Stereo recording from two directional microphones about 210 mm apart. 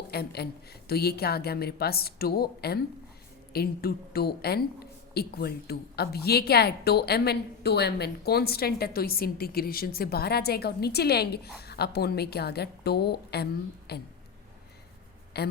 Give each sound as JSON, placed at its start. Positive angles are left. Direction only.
{"t": 0.1, "sound": "a woman's voice", "side_deg": 50}
{"t": 15.3, "sound": "a woman's voice", "side_deg": 50}